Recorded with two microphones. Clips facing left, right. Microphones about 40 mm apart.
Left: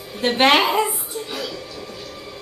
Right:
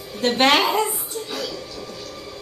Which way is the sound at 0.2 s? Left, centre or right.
Centre.